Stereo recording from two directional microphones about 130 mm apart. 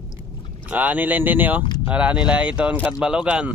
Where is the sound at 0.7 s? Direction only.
15° right (ahead or behind).